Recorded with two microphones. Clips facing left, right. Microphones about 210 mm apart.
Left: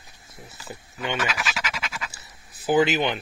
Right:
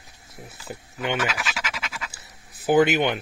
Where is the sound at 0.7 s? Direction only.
75° right (ahead or behind).